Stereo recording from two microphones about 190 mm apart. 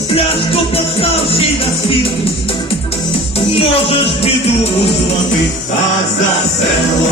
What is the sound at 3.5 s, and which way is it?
Music, 30° left (ahead or behind).